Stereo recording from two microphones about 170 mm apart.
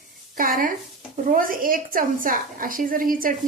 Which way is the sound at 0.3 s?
55° right (ahead or behind).